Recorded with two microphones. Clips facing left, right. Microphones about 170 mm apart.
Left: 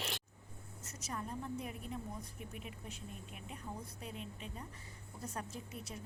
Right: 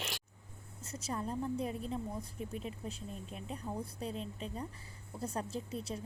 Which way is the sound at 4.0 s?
30° right (ahead or behind).